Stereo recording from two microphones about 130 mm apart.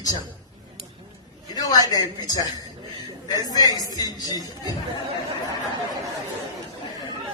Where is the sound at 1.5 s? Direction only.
30° left (ahead or behind).